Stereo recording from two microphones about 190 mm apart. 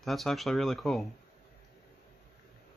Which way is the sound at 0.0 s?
Centre (ahead or behind).